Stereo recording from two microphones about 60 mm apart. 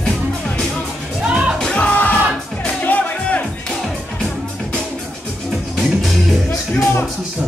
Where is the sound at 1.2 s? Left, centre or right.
Centre.